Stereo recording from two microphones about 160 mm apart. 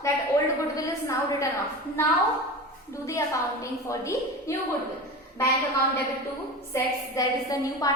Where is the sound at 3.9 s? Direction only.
20° left (ahead or behind).